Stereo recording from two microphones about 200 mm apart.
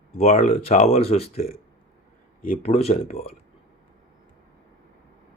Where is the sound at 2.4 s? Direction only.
40° left (ahead or behind).